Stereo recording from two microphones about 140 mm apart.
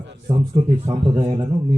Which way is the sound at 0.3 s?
35° right (ahead or behind).